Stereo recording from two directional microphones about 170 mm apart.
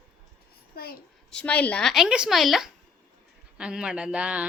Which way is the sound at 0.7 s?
65° left (ahead or behind).